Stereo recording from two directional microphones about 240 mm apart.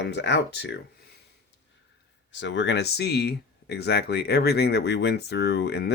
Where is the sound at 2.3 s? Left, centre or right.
Left.